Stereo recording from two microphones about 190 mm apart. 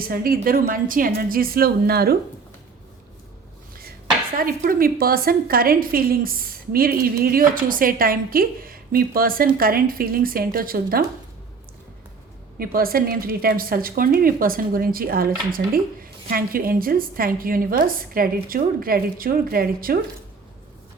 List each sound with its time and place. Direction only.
0.1 s a woman's voice: 50° right (ahead or behind)
4.4 s a woman's voice: 50° right (ahead or behind)
12.5 s a woman's voice: 50° right (ahead or behind)